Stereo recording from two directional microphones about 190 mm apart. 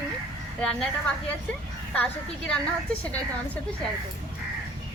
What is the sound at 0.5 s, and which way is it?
Speech, 5° left (ahead or behind).